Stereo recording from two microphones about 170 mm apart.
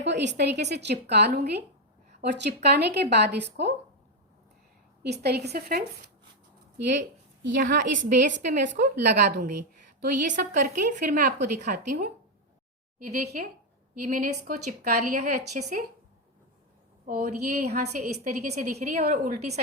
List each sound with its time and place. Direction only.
0.0 s a woman's voice: 90° right
5.0 s a woman's voice: 75° right (ahead or behind)
7.4 s a woman's voice: 60° right (ahead or behind)
8.8 s a woman's voice: 85° right
10.0 s a woman's voice: 50° right (ahead or behind)
13.1 s a woman's voice: 45° right (ahead or behind)
17.1 s a woman's voice: 45° right (ahead or behind)